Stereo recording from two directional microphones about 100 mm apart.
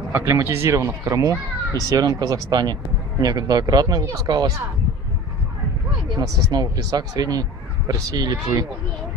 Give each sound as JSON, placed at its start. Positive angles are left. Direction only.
{"t": 0.1, "sound": "speech", "side_deg": -25}
{"t": 6.1, "sound": "speech", "side_deg": -40}